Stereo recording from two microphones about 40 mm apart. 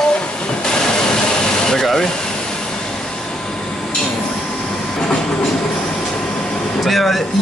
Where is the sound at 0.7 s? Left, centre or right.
Centre.